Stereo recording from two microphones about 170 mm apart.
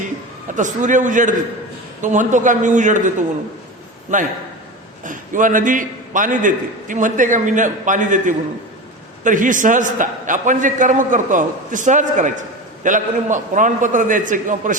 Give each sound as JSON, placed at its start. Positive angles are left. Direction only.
{"t": 0.5, "sound": "a man's voice", "side_deg": -45}